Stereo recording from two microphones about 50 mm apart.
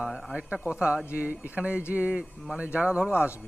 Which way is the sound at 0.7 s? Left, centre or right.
Right.